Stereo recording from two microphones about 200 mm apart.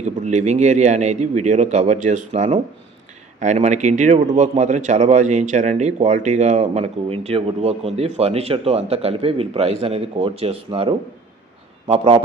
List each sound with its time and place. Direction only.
0.0 s a man's voice: 35° right (ahead or behind)